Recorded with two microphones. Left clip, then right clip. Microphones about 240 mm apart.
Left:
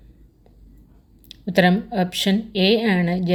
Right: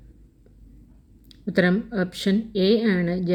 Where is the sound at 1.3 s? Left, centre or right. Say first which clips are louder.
Left 4 dB; left.